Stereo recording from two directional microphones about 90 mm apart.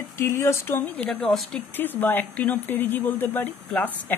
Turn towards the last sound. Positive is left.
turn(degrees=20)  # may be behind; listen again after turning